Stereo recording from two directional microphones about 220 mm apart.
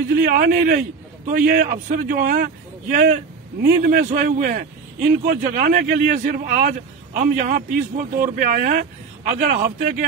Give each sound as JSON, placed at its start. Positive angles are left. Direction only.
{"t": 0.1, "sound": "a man's voice", "side_deg": -40}